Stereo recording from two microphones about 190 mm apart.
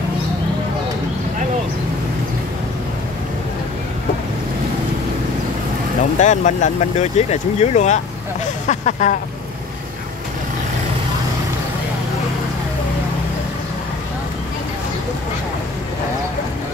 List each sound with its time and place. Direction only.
6.1 s speech: 40° left (ahead or behind)